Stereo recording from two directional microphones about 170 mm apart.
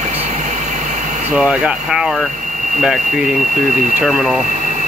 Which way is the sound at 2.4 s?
45° right (ahead or behind).